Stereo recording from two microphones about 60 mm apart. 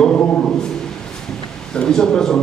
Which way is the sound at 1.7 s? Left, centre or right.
Centre.